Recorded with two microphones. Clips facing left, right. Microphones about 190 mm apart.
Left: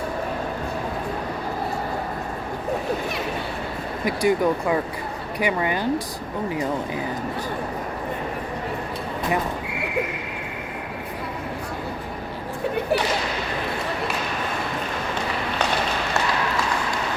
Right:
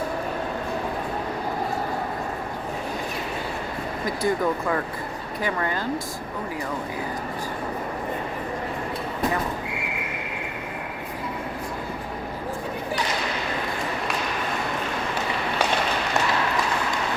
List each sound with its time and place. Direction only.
4.0 s speech: 15° left (ahead or behind)